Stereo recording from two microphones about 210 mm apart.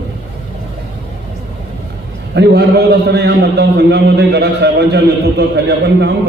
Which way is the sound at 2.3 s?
55° right (ahead or behind).